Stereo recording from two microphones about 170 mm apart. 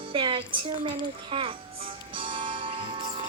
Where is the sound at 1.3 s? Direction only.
30° right (ahead or behind).